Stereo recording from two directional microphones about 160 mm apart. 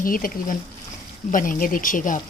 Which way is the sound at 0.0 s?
60° left (ahead or behind).